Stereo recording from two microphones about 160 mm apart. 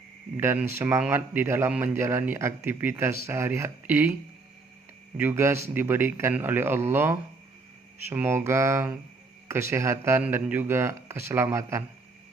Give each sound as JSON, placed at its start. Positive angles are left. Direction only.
{"t": 0.3, "sound": "speech", "side_deg": -10}
{"t": 5.1, "sound": "speech", "side_deg": -15}